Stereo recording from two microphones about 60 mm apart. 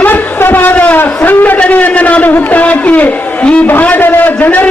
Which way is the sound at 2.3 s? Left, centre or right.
Left.